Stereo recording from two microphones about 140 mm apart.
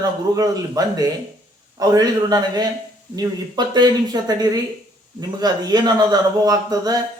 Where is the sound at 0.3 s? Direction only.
25° right (ahead or behind).